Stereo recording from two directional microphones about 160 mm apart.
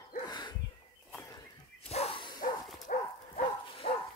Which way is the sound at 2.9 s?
55° left (ahead or behind).